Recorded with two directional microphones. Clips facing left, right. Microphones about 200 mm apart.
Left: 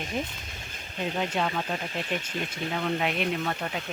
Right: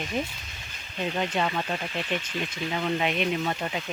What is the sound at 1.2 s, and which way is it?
Speech, 5° left (ahead or behind).